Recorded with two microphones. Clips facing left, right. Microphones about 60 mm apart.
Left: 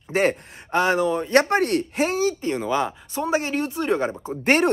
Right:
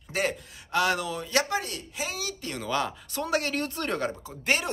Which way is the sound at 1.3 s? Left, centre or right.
Left.